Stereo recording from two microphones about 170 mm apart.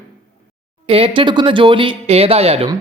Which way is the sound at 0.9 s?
30° right (ahead or behind).